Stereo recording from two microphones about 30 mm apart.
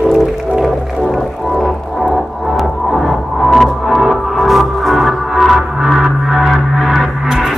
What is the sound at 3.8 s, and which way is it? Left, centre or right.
Music, centre.